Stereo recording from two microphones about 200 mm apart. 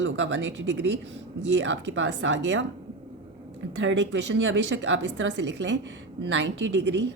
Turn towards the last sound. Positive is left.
turn(degrees=-65)  # may be behind; listen again after turning